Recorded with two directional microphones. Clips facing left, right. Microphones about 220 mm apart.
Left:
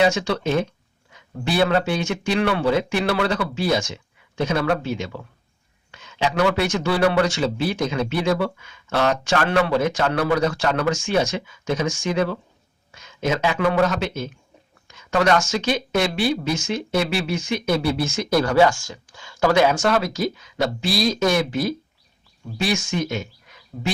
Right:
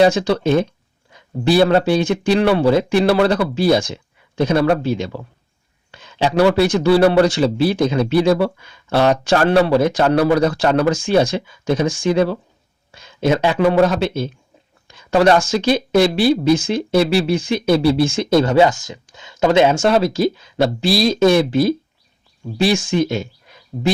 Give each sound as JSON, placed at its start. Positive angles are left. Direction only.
{"t": 0.0, "sound": "speech", "side_deg": -35}